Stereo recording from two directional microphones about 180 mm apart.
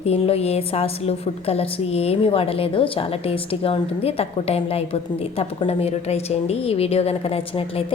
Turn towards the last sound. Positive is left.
turn(degrees=30)  # may be behind; listen again after turning